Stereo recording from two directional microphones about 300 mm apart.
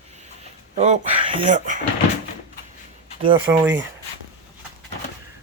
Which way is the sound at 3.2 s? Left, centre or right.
Centre.